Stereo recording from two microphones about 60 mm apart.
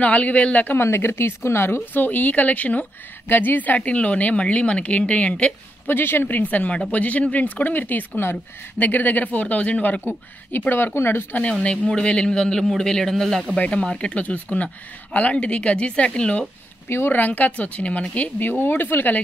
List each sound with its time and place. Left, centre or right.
0.0 s speech: left
0.7 s speech: left
2.0 s speech: left
5.9 s speech: left
10.7 s speech: left
11.6 s a man's voice: centre
13.7 s speech: centre
16.9 s speech: left
18.5 s speech: left